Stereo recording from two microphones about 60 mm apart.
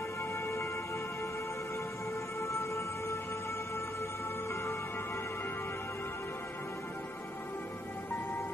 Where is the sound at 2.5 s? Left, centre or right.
Left.